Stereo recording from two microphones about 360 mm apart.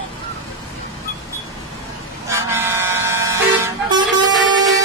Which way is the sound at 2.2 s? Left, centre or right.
Centre.